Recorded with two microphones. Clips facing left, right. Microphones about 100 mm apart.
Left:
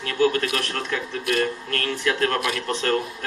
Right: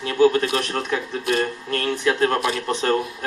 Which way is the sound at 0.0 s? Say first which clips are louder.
Right 4 dB; 25° right (ahead or behind).